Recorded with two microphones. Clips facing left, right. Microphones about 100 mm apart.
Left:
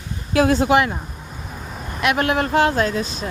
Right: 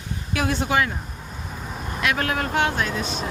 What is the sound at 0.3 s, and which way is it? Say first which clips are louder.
Speech: left 7 dB; 35° left (ahead or behind).